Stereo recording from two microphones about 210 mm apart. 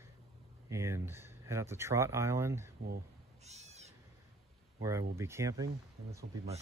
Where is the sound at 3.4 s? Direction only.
30° right (ahead or behind).